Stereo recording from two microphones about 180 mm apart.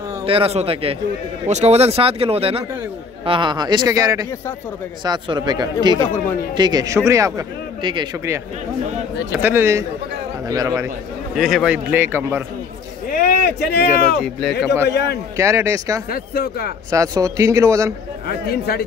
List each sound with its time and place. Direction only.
0.2 s a man's voice: 30° right (ahead or behind)
5.9 s speech: 15° left (ahead or behind)
6.5 s a man's voice: 20° right (ahead or behind)
9.4 s a man's voice: 10° right (ahead or behind)
11.3 s a man's voice: centre (ahead or behind)
13.1 s a sound: 60° left (ahead or behind)
14.9 s a man's voice: 70° left (ahead or behind)
15.3 s a man's voice: 15° right (ahead or behind)
16.1 s speech: 55° left (ahead or behind)
16.9 s a man's voice: 20° right (ahead or behind)
18.2 s speech: 55° left (ahead or behind)